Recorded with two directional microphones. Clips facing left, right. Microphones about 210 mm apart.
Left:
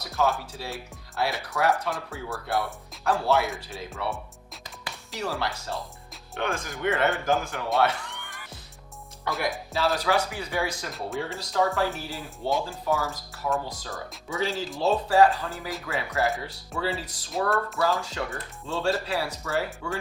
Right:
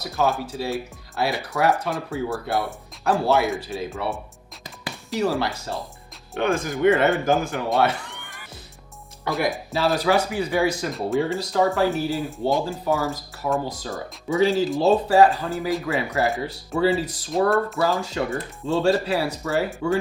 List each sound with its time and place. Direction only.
0.0 s speech: 15° right (ahead or behind)
4.6 s music: 10° right (ahead or behind)
6.3 s speech: 15° right (ahead or behind)
7.8 s cat: 10° right (ahead or behind)
9.2 s speech: 10° right (ahead or behind)